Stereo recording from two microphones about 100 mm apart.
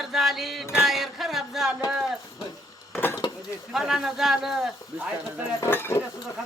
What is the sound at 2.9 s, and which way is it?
Dishes, 20° left (ahead or behind).